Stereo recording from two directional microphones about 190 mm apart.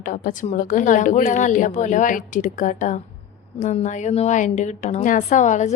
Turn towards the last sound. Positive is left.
turn(degrees=40)  # may be behind; listen again after turning